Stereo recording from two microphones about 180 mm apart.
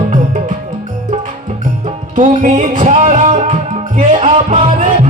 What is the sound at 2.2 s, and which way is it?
Music, 45° right (ahead or behind).